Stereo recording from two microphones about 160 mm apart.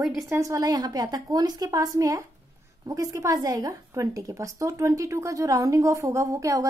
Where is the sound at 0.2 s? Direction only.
20° right (ahead or behind).